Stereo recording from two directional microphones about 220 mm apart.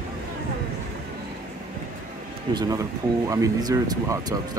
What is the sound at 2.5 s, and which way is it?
Speech, 15° right (ahead or behind).